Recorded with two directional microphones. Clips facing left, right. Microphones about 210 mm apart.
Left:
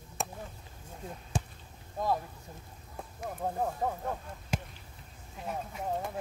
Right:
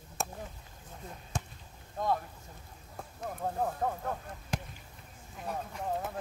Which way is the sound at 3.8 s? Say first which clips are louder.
Even; 5° left (ahead or behind).